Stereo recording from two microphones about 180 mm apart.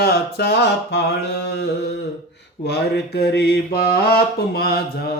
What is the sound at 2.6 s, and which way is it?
Speech, 65° left (ahead or behind).